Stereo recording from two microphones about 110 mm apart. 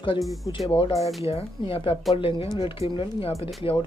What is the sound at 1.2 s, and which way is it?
Speech, 60° left (ahead or behind).